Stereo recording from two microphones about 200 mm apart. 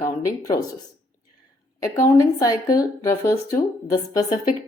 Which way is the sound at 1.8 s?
15° left (ahead or behind).